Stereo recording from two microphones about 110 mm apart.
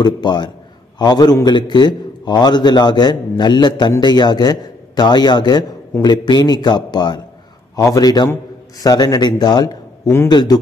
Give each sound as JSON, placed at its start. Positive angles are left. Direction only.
{"t": 0.0, "sound": "a man's voice", "side_deg": 40}